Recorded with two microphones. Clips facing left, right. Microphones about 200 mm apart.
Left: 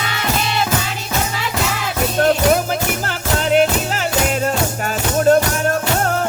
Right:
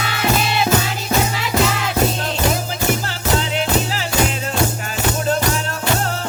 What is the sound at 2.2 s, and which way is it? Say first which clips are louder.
Music: left 7 dB; 60° left (ahead or behind).